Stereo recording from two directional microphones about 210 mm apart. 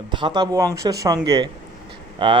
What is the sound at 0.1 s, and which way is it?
A man's voice, 20° right (ahead or behind).